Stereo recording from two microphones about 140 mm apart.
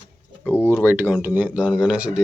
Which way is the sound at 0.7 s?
15° right (ahead or behind).